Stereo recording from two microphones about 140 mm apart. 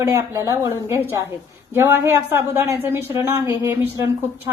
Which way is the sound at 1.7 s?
20° right (ahead or behind).